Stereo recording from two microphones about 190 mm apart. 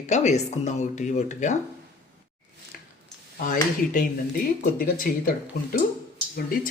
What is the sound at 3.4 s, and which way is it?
Speech, 45° left (ahead or behind).